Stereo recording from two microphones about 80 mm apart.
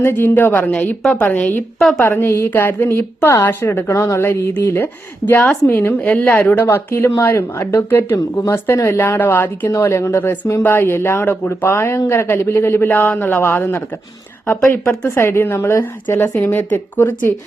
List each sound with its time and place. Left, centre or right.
0.0 s a woman's voice: left
6.7 s a woman's voice: left
9.8 s a woman's voice: left